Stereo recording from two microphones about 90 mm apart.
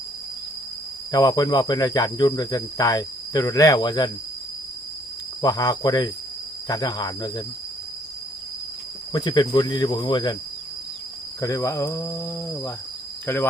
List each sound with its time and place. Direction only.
1.1 s speech: 45° left (ahead or behind)
5.4 s speech: 45° left (ahead or behind)
9.1 s speech: 55° left (ahead or behind)
11.3 s speech: 40° left (ahead or behind); by 13.5 s 25° left (ahead or behind)